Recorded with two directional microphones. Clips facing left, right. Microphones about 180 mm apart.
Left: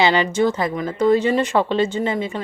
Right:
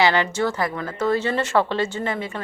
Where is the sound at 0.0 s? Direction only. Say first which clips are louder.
Left 3 dB; 15° left (ahead or behind).